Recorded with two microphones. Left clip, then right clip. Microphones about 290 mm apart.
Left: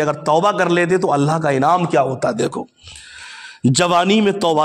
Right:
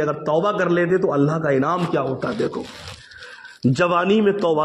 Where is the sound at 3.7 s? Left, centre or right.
Left.